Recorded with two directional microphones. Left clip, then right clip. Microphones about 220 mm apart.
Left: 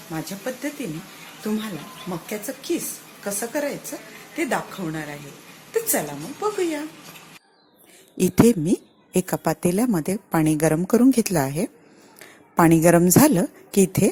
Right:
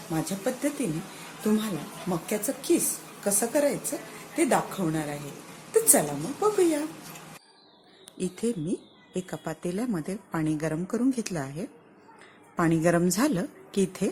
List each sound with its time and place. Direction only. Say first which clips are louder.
0.1 s a woman's voice: even; centre (ahead or behind)
8.2 s a woman's voice: left 12 dB; 35° left (ahead or behind)